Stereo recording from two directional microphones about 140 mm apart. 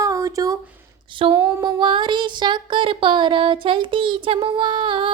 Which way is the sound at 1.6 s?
35° right (ahead or behind).